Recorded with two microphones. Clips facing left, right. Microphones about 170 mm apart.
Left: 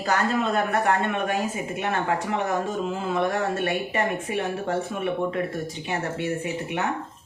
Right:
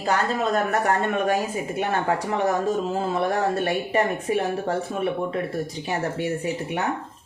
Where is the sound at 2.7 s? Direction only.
35° right (ahead or behind).